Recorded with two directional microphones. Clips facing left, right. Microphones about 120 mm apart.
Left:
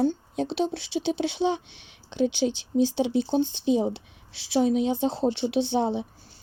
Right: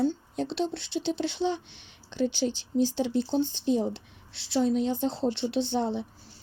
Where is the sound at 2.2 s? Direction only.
75° left (ahead or behind).